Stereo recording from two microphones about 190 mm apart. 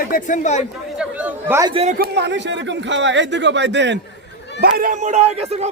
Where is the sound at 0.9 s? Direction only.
10° right (ahead or behind).